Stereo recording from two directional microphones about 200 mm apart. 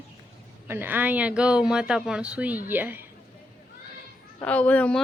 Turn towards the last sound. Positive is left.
turn(degrees=5)  # may be behind; listen again after turning